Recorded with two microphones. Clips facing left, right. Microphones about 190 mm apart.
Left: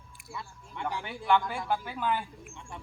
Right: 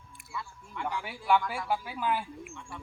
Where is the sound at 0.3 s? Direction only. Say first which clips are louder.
Right 2 dB; 25° left (ahead or behind).